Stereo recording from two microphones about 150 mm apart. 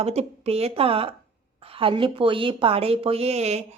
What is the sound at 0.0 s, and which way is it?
Speech, 45° right (ahead or behind).